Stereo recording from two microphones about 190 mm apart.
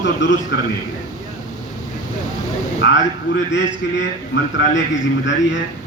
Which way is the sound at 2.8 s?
75° left (ahead or behind).